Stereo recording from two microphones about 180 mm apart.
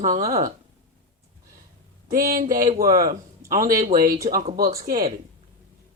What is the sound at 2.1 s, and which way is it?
Speech, 55° right (ahead or behind).